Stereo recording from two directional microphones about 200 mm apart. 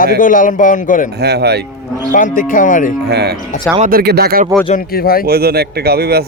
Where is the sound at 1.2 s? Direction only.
55° right (ahead or behind).